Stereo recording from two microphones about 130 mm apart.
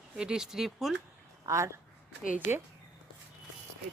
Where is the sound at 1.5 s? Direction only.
25° right (ahead or behind).